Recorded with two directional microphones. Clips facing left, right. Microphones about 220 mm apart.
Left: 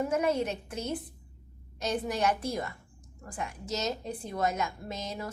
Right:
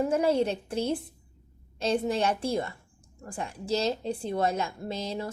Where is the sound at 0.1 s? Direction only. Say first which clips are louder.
Right 4 dB; 30° right (ahead or behind).